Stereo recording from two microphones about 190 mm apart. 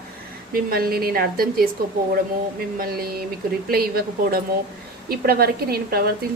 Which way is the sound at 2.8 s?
55° right (ahead or behind).